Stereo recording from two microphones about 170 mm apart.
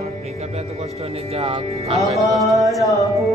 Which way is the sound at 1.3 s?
35° right (ahead or behind).